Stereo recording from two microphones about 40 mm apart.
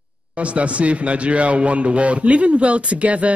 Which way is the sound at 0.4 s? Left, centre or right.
Right.